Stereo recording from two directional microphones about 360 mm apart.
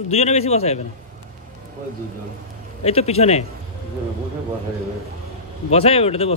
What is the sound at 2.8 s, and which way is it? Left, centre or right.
Speech, centre.